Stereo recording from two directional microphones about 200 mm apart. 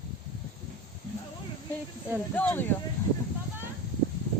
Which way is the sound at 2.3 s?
10° left (ahead or behind).